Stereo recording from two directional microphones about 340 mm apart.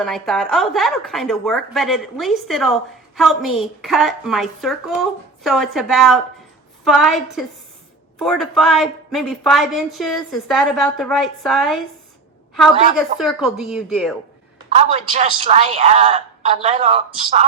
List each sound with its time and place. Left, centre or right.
0.0 s a woman's voice: centre
13.0 s a woman's voice: centre
14.8 s a woman's voice: centre